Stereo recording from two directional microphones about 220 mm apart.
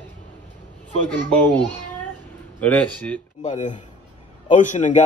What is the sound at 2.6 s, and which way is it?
Speech, 5° left (ahead or behind).